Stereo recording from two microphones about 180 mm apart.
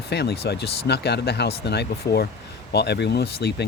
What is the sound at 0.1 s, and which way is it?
Speech, 65° left (ahead or behind).